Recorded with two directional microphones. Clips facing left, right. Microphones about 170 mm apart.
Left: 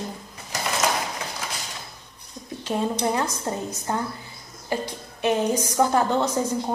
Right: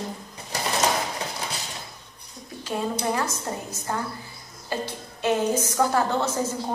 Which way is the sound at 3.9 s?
20° left (ahead or behind).